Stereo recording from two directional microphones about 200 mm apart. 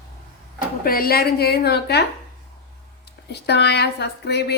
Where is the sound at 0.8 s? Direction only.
50° left (ahead or behind).